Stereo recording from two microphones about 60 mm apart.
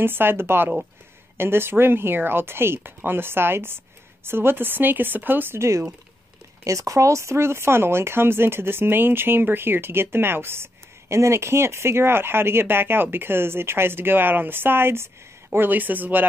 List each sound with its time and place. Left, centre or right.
0.0 s speech: right
5.6 s speech: right
6.6 s speech: right